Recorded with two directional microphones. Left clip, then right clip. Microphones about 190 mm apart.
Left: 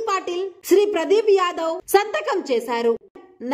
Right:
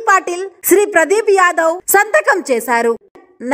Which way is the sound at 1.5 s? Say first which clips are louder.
Right 7 dB; 20° right (ahead or behind).